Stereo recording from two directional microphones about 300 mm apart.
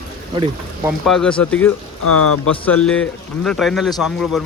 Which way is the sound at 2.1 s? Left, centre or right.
Left.